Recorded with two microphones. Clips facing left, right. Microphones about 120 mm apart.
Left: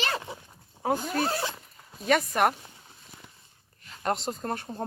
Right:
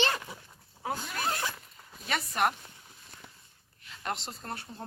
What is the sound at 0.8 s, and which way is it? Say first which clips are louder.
Speech: left 8 dB; 45° left (ahead or behind).